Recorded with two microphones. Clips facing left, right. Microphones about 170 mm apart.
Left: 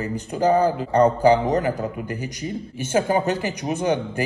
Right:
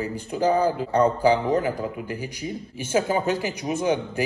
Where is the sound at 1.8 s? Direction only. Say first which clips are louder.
Left 2 dB; 5° right (ahead or behind).